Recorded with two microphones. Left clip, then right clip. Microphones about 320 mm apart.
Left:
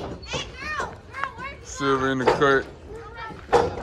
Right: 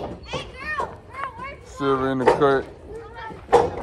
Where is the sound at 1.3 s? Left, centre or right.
Right.